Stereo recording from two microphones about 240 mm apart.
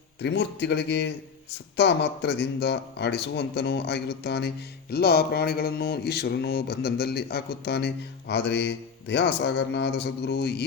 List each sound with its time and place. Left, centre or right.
0.2 s speech: left